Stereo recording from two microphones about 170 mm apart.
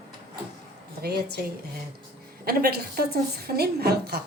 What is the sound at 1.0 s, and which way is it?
Speech, 65° right (ahead or behind).